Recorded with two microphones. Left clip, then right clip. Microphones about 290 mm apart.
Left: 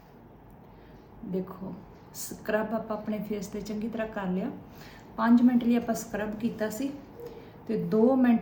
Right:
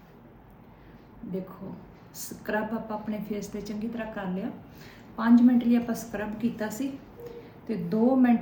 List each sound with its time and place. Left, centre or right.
2.1 s a woman's voice: centre